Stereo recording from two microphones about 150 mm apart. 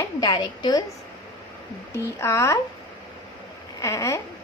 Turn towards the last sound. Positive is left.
turn(degrees=20)  # may be behind; listen again after turning